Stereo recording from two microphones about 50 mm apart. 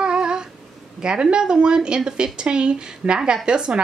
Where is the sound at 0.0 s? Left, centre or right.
Centre.